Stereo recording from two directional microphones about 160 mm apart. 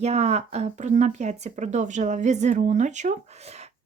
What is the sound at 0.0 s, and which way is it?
Speech, 40° right (ahead or behind).